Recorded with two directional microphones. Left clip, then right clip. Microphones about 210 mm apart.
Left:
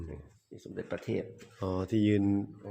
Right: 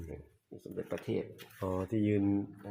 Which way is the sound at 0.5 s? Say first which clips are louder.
Left 1 dB; 25° left (ahead or behind).